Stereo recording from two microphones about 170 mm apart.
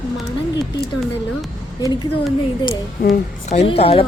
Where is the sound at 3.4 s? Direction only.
35° left (ahead or behind).